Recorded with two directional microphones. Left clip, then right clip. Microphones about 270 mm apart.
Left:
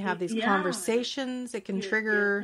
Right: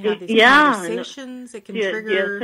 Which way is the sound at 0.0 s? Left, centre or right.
Left.